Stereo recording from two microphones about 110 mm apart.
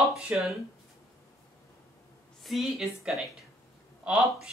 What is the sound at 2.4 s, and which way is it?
A woman's voice, 5° right (ahead or behind).